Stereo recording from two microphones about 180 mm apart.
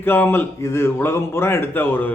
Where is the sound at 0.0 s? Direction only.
10° left (ahead or behind).